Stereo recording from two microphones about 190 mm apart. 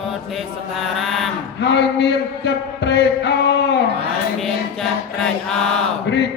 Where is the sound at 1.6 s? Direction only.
65° left (ahead or behind).